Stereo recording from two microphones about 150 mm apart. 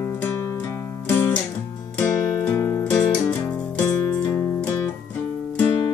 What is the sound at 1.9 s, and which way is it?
Music, 15° left (ahead or behind).